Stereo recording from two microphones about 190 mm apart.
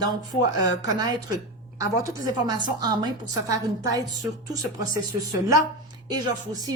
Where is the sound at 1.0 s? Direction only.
20° right (ahead or behind).